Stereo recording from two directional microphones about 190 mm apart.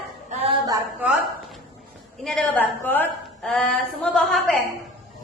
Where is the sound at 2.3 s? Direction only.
5° left (ahead or behind).